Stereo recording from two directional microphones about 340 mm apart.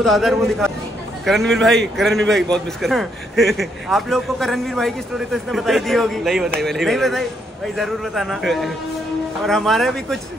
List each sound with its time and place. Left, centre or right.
0.0 s a man's voice: centre